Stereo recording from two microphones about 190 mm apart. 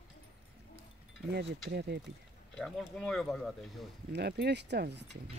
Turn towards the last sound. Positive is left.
turn(degrees=-60)  # may be behind; listen again after turning